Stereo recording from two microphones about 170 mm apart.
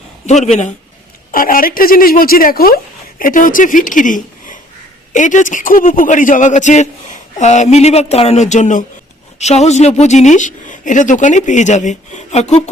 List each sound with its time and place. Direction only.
0.3 s a man's voice: 40° left (ahead or behind)
1.3 s a woman's voice: 55° left (ahead or behind)